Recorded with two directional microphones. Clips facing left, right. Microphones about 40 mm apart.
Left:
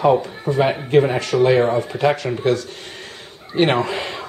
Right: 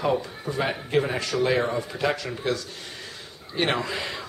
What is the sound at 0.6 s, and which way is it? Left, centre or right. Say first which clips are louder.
Speech: left 8 dB; left.